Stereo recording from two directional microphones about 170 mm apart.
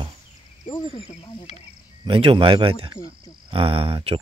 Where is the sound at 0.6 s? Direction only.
30° left (ahead or behind).